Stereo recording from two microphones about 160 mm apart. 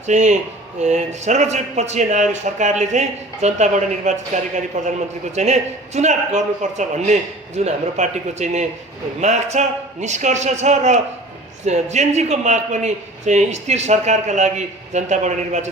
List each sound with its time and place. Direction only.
0.0 s a man's voice: 50° right (ahead or behind)